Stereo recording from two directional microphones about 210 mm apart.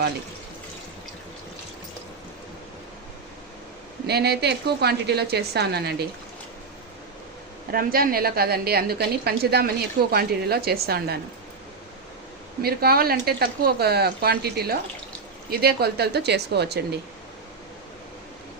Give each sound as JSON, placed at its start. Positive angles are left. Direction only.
{"t": 4.0, "sound": "a woman's voice", "side_deg": -50}
{"t": 7.7, "sound": "a woman's voice", "side_deg": -45}
{"t": 12.6, "sound": "a woman's voice", "side_deg": -45}